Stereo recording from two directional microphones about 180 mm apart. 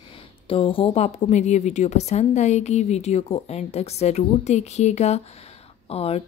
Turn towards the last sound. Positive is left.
turn(degrees=35)  # may be behind; listen again after turning